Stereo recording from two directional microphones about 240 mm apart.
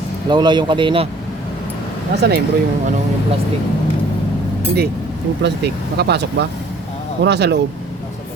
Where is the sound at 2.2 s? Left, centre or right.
Right.